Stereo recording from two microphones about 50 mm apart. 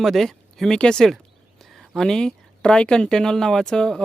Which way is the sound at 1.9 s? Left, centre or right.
Centre.